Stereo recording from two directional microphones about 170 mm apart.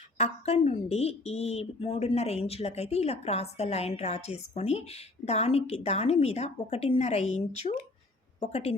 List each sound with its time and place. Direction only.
0.2 s speech: 35° left (ahead or behind)